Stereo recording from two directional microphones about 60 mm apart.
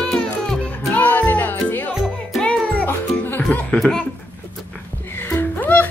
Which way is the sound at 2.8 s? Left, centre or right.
Left.